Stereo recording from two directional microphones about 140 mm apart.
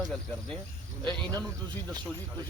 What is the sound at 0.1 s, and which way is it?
Speech, 5° left (ahead or behind).